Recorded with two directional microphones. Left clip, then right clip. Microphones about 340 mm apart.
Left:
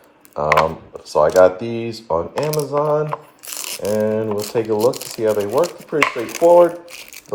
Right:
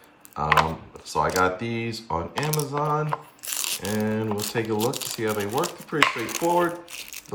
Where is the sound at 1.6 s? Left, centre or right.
Centre.